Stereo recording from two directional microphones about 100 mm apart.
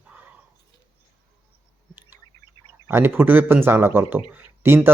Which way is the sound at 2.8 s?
20° right (ahead or behind).